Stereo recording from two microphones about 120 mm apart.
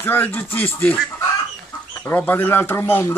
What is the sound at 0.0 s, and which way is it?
Speech, 15° left (ahead or behind).